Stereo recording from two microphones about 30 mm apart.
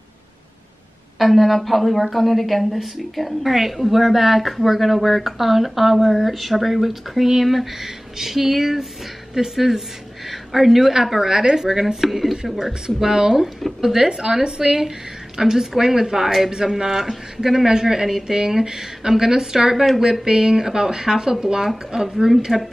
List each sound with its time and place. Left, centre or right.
1.1 s a woman's voice: centre
11.1 s a woman's voice: centre
12.8 s speech: right